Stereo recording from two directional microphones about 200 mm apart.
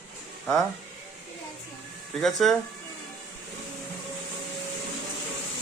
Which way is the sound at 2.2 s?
Centre (ahead or behind).